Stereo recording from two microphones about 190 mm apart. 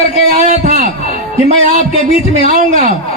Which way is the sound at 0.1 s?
35° right (ahead or behind).